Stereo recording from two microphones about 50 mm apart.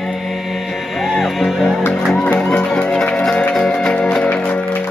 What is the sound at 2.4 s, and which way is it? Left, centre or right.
Music, left.